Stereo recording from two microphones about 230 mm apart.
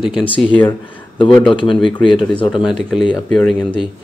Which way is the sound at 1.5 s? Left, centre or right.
Left.